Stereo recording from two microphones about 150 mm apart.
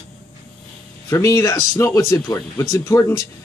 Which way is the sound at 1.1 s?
20° left (ahead or behind).